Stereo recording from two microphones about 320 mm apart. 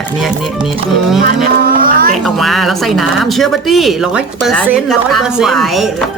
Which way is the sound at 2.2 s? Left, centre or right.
Centre.